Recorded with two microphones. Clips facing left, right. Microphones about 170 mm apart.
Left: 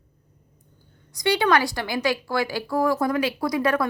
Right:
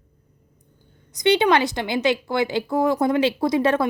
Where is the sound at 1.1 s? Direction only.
20° right (ahead or behind).